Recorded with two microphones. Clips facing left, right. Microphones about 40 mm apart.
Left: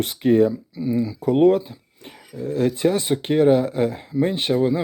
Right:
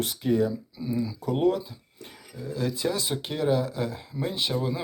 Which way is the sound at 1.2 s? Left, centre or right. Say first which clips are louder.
Left 9 dB; left.